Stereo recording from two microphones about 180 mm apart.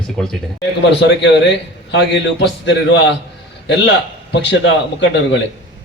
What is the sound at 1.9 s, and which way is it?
Speech, 75° left (ahead or behind).